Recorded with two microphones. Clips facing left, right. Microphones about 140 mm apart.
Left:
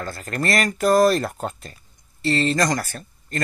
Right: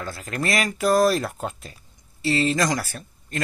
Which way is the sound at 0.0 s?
Centre (ahead or behind).